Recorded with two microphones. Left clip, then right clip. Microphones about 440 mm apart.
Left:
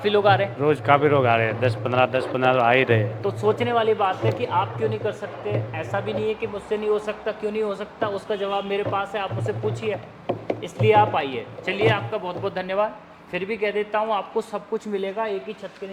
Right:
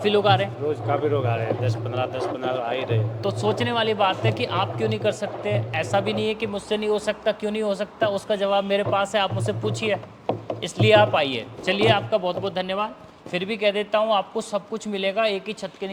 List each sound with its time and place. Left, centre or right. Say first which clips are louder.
0.0 s a man's voice: left 1 dB; centre
0.7 s a man's voice: left 7 dB; left
3.5 s speech: left 4 dB; right